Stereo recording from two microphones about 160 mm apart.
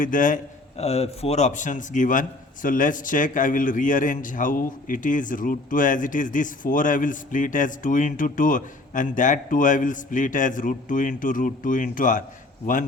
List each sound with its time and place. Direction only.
0.0 s a man's voice: 55° left (ahead or behind)
0.8 s a man's voice: 40° left (ahead or behind)